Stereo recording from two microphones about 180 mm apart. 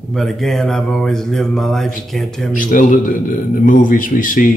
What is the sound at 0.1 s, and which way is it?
Mantra, centre (ahead or behind).